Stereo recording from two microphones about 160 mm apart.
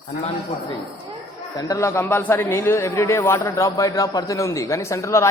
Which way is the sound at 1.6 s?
20° left (ahead or behind).